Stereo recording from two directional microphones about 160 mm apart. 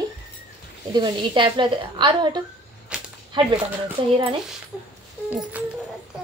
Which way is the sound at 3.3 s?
30° right (ahead or behind).